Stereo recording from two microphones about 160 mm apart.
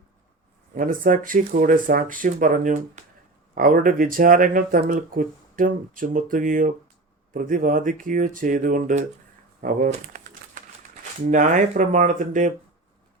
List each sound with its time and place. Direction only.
0.8 s speech: 55° right (ahead or behind)
9.6 s typewriter: 55° right (ahead or behind)
11.3 s speech: 50° right (ahead or behind)